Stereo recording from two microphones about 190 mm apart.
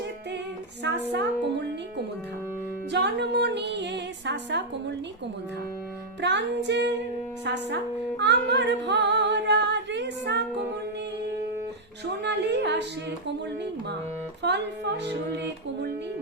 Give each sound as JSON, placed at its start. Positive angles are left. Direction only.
{"t": 0.9, "sound": "a woman's voice", "side_deg": -65}
{"t": 2.9, "sound": "a woman's voice", "side_deg": -65}
{"t": 6.2, "sound": "a woman's voice", "side_deg": -65}
{"t": 8.2, "sound": "music", "side_deg": -65}
{"t": 12.2, "sound": "music", "side_deg": -65}
{"t": 14.4, "sound": "a woman's voice", "side_deg": -65}